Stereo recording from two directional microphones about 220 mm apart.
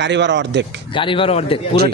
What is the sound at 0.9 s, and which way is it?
Speech, 25° left (ahead or behind).